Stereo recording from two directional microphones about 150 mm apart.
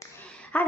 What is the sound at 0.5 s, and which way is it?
Speech, 10° left (ahead or behind).